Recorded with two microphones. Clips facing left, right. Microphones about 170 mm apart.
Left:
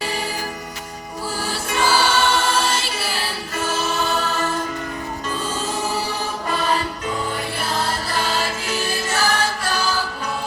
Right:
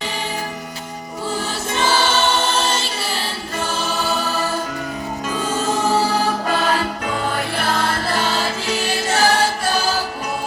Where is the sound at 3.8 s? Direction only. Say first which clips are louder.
Left 1 dB; centre (ahead or behind).